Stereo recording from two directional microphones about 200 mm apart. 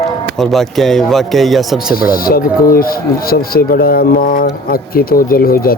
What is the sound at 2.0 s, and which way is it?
Speech, 45° left (ahead or behind).